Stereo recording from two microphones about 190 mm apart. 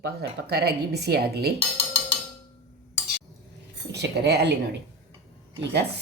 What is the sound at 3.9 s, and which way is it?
Speech, 60° right (ahead or behind).